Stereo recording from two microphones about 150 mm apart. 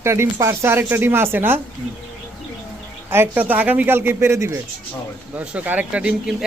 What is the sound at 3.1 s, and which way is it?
Speech, 15° right (ahead or behind).